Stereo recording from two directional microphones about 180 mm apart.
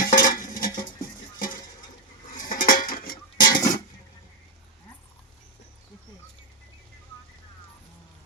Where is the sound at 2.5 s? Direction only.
50° left (ahead or behind).